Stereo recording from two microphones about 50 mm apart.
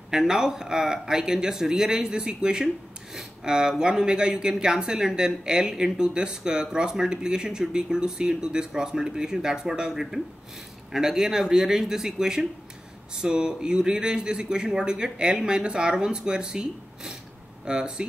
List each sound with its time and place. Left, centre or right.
0.1 s speech: centre